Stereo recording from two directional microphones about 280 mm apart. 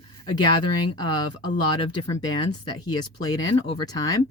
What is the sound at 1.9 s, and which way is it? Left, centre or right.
Speech, centre.